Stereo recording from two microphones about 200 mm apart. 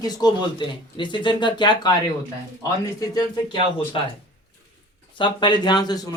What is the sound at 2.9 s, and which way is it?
Speech, 20° left (ahead or behind).